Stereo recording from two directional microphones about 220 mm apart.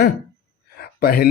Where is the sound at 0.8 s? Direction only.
45° left (ahead or behind).